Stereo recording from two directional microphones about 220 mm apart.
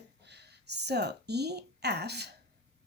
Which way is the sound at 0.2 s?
50° right (ahead or behind).